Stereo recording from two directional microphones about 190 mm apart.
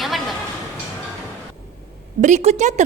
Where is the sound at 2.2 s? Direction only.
40° right (ahead or behind).